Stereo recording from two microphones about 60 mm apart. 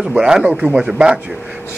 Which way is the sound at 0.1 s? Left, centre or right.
Centre.